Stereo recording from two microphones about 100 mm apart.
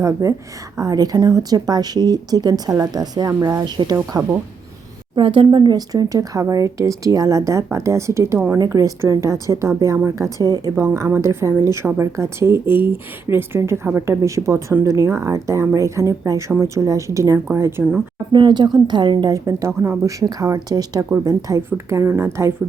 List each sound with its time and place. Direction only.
0.0 s a woman's voice: 35° right (ahead or behind)
5.1 s a woman's voice: 55° right (ahead or behind); by 8.5 s 25° right (ahead or behind)
8.5 s a woman's voice: 40° right (ahead or behind)
10.8 s a woman's voice: 30° right (ahead or behind)
18.3 s speech: 50° right (ahead or behind)
19.5 s a woman's voice: 30° right (ahead or behind)